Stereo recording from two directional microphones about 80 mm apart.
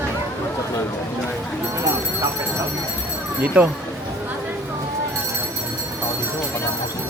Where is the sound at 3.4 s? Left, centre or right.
Right.